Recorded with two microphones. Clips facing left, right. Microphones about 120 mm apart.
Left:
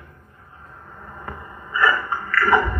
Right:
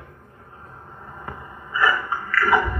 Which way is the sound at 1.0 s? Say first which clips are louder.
Left 1 dB; 10° right (ahead or behind).